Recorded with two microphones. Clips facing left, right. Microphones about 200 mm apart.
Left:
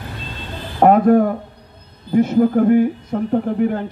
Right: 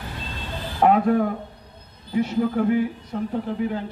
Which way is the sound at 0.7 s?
45° left (ahead or behind).